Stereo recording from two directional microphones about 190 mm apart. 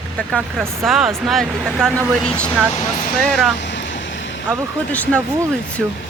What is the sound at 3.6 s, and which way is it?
Vehicle, 70° left (ahead or behind).